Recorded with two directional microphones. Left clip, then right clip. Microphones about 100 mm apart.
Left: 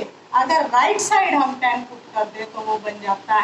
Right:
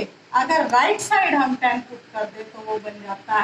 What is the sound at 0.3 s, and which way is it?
A woman's voice, 40° right (ahead or behind).